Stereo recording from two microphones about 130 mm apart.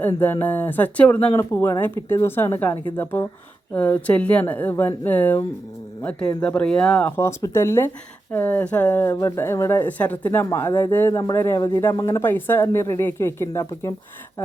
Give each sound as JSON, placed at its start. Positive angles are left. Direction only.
{"t": 0.2, "sound": "speech", "side_deg": 15}
{"t": 1.3, "sound": "speech", "side_deg": 20}
{"t": 12.2, "sound": "speech", "side_deg": 15}